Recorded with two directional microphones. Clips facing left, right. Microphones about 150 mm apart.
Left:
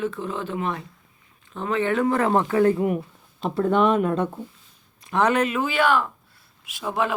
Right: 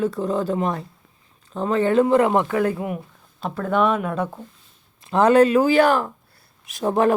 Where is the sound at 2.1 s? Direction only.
15° right (ahead or behind).